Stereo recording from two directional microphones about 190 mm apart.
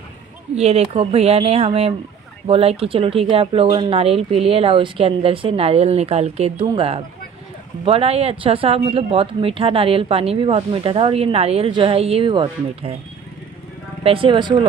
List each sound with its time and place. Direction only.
0.6 s speech: 35° right (ahead or behind)
14.0 s speech: 25° right (ahead or behind)